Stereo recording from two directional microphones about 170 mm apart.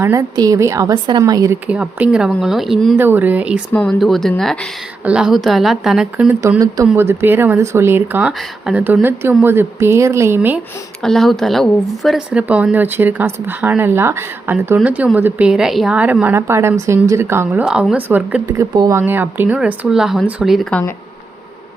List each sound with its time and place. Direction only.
0.0 s a woman's voice: 20° right (ahead or behind)
1.6 s a woman's voice: 10° right (ahead or behind)
3.7 s a woman's voice: 5° left (ahead or behind)
6.9 s speech: 15° right (ahead or behind)
11.0 s speech: centre (ahead or behind)
18.4 s speech: 20° right (ahead or behind); by 20.9 s 5° left (ahead or behind)